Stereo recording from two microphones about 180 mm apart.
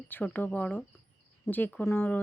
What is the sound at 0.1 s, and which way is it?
A woman's voice, 10° left (ahead or behind).